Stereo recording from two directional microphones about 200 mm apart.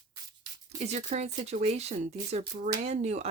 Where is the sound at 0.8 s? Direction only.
35° right (ahead or behind).